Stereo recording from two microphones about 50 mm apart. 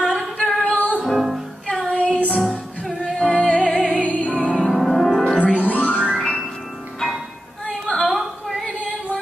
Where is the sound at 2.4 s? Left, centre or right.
Centre.